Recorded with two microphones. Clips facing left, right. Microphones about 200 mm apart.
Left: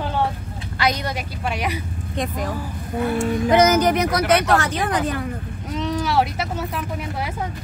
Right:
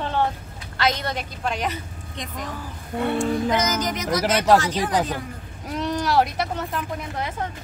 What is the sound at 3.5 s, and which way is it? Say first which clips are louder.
Speech: left 8 dB; 60° left (ahead or behind).